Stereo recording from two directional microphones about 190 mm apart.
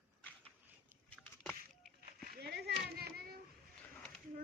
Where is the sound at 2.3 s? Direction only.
60° right (ahead or behind).